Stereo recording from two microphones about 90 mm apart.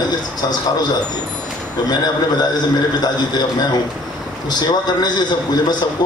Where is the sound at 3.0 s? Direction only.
50° left (ahead or behind).